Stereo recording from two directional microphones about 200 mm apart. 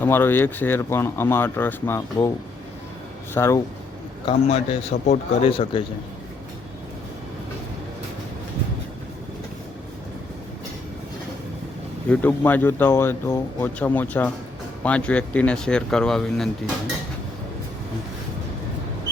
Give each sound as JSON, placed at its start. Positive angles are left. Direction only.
{"t": 0.0, "sound": "speech", "side_deg": 10}
{"t": 3.3, "sound": "speech", "side_deg": 15}
{"t": 4.3, "sound": "a man's voice", "side_deg": 30}
{"t": 12.0, "sound": "speech", "side_deg": 10}